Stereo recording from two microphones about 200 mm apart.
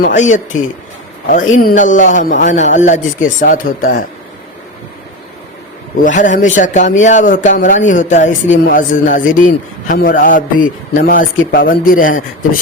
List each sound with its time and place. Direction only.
0.0 s speech: 40° left (ahead or behind)
1.6 s speech: 40° left (ahead or behind)
6.0 s a man's voice: 40° left (ahead or behind)